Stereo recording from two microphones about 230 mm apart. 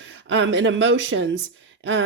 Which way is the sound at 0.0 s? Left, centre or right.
Right.